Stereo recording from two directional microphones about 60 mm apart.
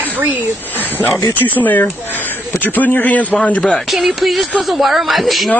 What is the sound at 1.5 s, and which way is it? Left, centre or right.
Speech, left.